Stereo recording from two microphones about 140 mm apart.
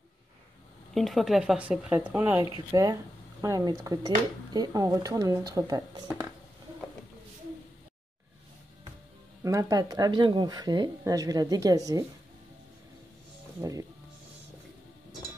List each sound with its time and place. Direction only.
0.9 s speech: centre (ahead or behind)
2.7 s speech: 25° right (ahead or behind)
9.4 s speech: 25° right (ahead or behind)
13.6 s speech: 25° right (ahead or behind)